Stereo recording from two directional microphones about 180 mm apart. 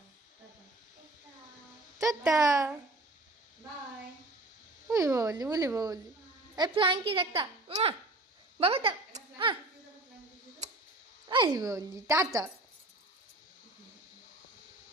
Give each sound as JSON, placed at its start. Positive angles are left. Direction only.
{"t": 2.0, "sound": "a woman's voice", "side_deg": -20}
{"t": 4.9, "sound": "a woman's voice", "side_deg": -20}
{"t": 8.5, "sound": "a sound", "side_deg": -30}
{"t": 11.3, "sound": "a woman's voice", "side_deg": -25}